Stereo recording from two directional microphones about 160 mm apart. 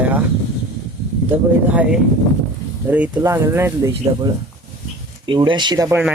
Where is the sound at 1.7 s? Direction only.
10° right (ahead or behind).